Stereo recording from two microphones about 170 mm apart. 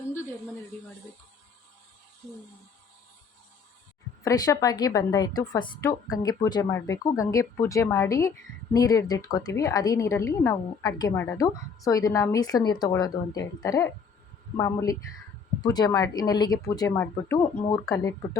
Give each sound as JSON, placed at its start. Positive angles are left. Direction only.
{"t": 4.2, "sound": "a woman's voice", "side_deg": 20}